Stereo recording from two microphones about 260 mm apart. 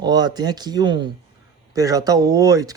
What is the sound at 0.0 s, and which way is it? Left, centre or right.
Speech, centre.